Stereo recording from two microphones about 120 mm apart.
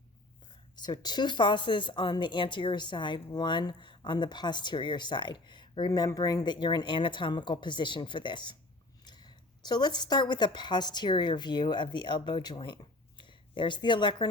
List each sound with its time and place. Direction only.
0.8 s a woman's voice: 35° left (ahead or behind)